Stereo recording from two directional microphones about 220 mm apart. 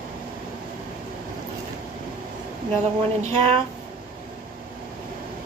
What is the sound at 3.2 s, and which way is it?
Speech, 30° right (ahead or behind).